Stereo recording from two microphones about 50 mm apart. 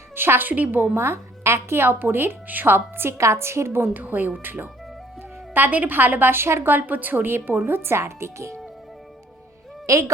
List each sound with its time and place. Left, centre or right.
0.2 s a woman's voice: right
0.5 s speech: right
0.9 s a woman's voice: right
3.2 s a woman's voice: right
3.9 s a woman's voice: right
9.8 s speech: right